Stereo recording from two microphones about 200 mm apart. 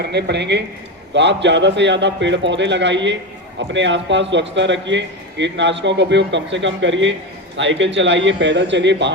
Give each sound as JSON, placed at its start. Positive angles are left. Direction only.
{"t": 0.0, "sound": "speech", "side_deg": -55}